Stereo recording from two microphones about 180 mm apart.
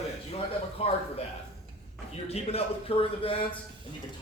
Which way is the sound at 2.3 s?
30° left (ahead or behind).